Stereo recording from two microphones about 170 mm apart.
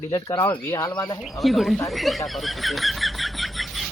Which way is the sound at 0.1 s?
20° left (ahead or behind).